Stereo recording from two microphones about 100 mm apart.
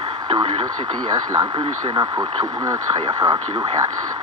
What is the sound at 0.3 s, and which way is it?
Speech, 55° right (ahead or behind).